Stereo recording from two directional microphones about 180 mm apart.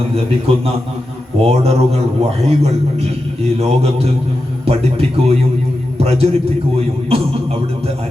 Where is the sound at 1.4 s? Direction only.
35° right (ahead or behind).